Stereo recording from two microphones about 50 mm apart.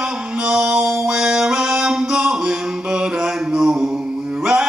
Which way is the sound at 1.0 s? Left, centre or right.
Centre.